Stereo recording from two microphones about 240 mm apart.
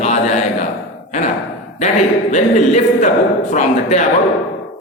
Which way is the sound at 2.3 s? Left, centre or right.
Left.